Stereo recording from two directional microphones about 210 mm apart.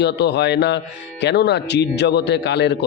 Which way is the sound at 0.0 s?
55° left (ahead or behind).